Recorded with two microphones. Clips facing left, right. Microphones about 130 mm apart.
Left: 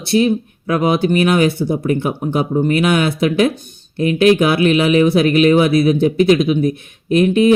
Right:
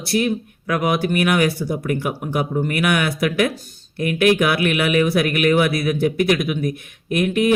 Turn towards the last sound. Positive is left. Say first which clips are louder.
# left 6 dB
turn(degrees=25)  # may be behind; listen again after turning